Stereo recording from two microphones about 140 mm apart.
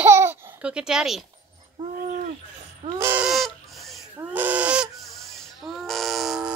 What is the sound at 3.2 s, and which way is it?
Fowl, centre (ahead or behind).